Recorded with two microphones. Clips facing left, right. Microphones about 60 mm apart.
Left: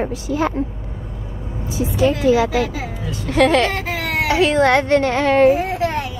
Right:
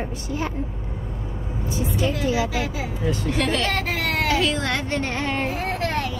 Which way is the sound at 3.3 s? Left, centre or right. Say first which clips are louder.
Left 12 dB; left.